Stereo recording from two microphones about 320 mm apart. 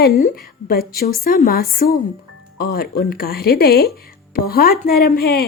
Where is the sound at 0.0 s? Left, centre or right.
Left.